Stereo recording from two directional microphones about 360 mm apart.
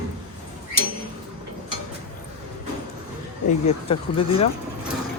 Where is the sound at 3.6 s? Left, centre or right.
Centre.